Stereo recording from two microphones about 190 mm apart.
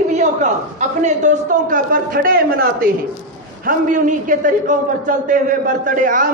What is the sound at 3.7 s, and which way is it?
A man's voice, 45° right (ahead or behind).